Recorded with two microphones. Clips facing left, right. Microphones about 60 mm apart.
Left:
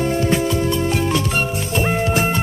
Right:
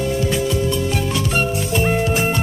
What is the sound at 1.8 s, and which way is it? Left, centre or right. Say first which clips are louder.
Music: even; centre.